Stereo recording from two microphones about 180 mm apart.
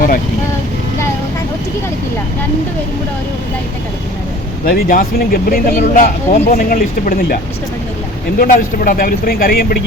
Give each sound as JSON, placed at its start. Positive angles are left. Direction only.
{"t": 4.6, "sound": "speech", "side_deg": 50}
{"t": 8.4, "sound": "speech", "side_deg": 50}